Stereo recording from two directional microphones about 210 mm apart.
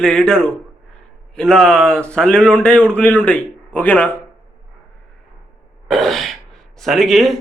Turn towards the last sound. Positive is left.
turn(degrees=0)  # may be behind; listen again after turning